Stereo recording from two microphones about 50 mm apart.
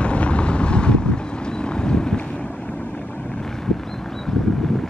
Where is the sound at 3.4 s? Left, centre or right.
Centre.